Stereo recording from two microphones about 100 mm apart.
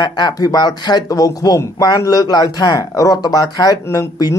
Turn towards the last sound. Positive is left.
turn(degrees=35)  # may be behind; listen again after turning